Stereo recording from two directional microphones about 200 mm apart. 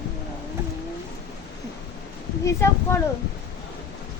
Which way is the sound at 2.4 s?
15° left (ahead or behind).